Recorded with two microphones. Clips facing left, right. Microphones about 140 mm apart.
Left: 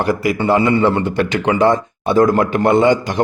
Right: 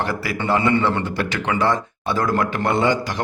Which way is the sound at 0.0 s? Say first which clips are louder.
Left 7 dB; 15° left (ahead or behind).